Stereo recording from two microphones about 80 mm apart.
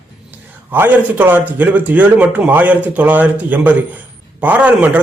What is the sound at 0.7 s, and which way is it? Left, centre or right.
A man's voice, right.